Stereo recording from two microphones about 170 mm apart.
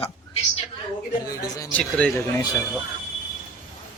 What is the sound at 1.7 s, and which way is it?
Speech, 10° left (ahead or behind).